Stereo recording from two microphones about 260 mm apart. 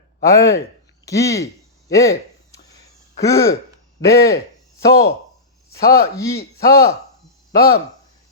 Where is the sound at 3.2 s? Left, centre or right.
Centre.